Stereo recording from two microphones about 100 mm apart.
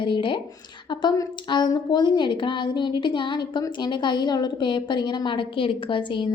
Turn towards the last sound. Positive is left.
turn(degrees=55)  # may be behind; listen again after turning